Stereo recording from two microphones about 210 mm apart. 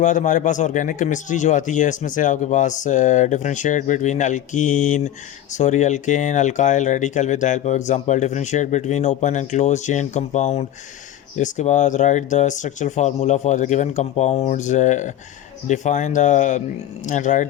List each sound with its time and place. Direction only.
0.0 s speech: 35° left (ahead or behind)